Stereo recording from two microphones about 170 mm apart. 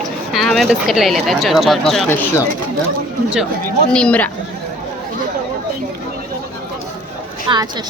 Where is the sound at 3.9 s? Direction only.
10° left (ahead or behind).